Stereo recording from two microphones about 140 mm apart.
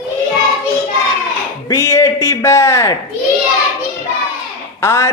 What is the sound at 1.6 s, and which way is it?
Speech, 20° left (ahead or behind).